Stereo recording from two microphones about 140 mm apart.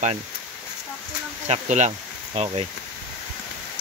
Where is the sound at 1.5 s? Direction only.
60° right (ahead or behind).